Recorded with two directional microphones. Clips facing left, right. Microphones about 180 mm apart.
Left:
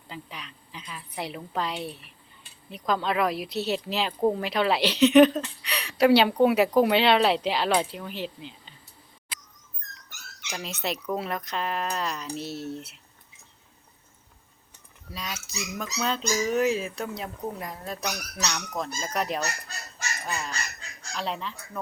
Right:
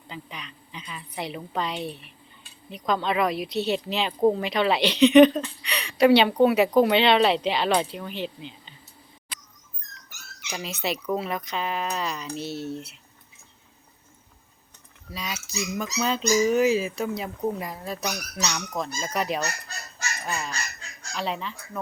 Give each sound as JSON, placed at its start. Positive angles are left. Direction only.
{"t": 0.1, "sound": "speech", "side_deg": 5}
{"t": 10.1, "sound": "speech", "side_deg": -5}
{"t": 15.1, "sound": "speech", "side_deg": 0}